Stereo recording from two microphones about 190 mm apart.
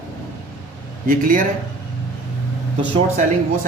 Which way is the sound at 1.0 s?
45° right (ahead or behind).